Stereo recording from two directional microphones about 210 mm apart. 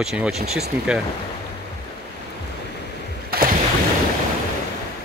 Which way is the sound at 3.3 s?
40° right (ahead or behind).